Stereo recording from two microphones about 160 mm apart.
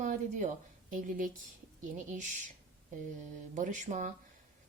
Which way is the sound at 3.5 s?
50° right (ahead or behind).